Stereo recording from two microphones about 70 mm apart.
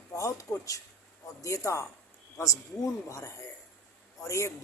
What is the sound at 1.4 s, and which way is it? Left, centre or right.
A man's voice, left.